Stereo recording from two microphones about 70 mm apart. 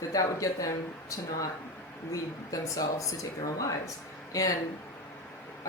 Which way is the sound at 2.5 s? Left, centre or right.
Left.